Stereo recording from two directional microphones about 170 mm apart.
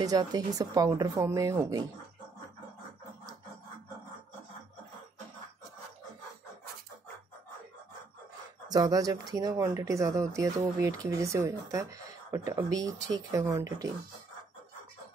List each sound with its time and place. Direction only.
0.0 s speech: 25° right (ahead or behind)
8.6 s speech: 25° right (ahead or behind)